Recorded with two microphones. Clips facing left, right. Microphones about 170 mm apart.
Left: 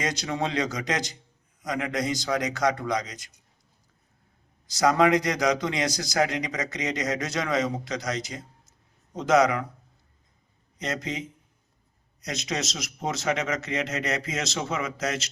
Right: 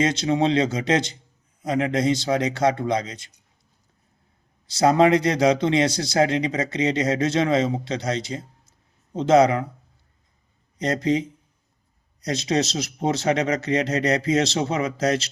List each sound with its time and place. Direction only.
0.0 s a man's voice: 25° right (ahead or behind)
4.6 s a man's voice: 30° right (ahead or behind)
10.8 s speech: 35° right (ahead or behind)